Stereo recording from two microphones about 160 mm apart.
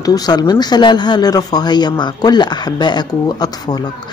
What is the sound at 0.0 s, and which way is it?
Speech, 25° left (ahead or behind).